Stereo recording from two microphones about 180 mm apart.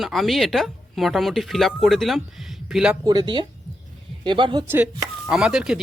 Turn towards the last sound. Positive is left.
turn(degrees=-5)  # may be behind; listen again after turning